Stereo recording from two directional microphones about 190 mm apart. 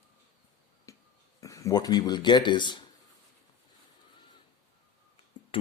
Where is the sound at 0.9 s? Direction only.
15° left (ahead or behind).